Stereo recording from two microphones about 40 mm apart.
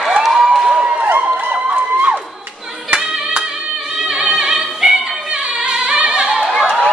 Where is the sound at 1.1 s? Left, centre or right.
Right.